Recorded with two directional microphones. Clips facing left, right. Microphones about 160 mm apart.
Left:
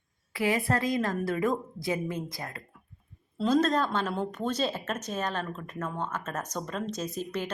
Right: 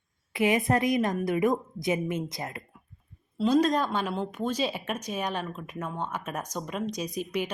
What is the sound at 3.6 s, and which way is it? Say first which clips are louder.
Speech: right 1 dB; 10° right (ahead or behind).